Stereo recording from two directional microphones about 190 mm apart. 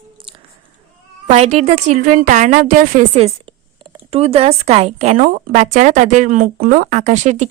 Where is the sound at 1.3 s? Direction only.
35° right (ahead or behind).